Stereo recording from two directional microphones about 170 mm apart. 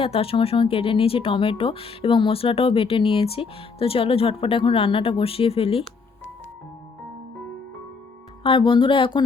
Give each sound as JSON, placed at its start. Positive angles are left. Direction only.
{"t": 0.0, "sound": "speech", "side_deg": 35}
{"t": 8.4, "sound": "speech", "side_deg": 30}